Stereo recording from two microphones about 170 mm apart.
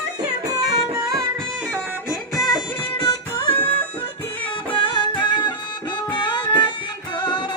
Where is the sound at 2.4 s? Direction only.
25° left (ahead or behind).